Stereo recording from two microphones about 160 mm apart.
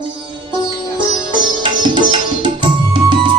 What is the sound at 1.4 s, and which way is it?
Music, 30° right (ahead or behind).